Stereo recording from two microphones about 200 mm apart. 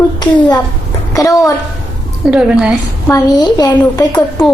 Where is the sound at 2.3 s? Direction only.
5° right (ahead or behind).